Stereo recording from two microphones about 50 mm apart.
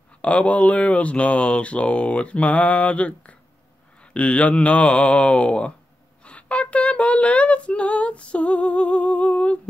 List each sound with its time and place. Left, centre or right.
0.2 s female singing: left